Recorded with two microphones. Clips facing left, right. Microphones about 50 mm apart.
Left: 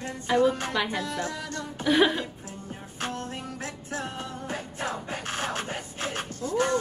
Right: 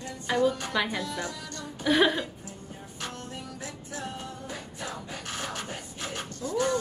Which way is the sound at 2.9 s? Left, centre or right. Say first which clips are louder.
Left 5 dB; left.